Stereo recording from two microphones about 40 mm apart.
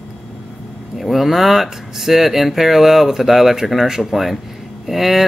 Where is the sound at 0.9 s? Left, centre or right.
Centre.